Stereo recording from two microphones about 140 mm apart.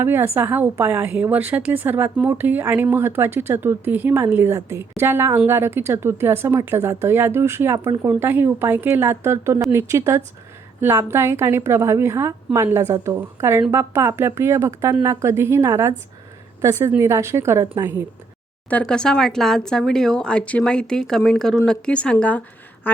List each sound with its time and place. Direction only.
0.0 s a woman's voice: 15° right (ahead or behind)
18.7 s a woman's voice: 5° left (ahead or behind)